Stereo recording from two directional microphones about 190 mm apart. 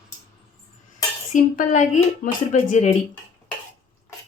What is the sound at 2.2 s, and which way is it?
Speech, 40° left (ahead or behind).